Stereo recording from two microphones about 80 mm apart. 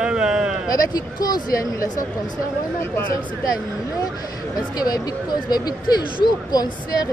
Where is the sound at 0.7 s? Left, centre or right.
Left.